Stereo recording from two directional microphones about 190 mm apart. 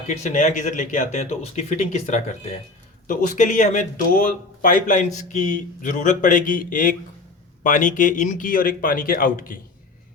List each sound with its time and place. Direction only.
0.1 s speech: 40° left (ahead or behind)